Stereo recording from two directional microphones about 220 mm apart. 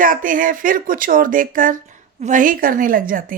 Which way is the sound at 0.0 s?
40° right (ahead or behind).